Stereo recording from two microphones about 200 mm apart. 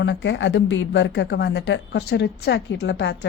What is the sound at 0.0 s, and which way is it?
A woman's voice, 65° left (ahead or behind).